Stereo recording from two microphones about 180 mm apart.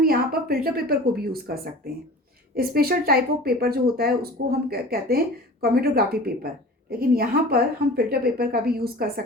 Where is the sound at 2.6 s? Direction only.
55° right (ahead or behind).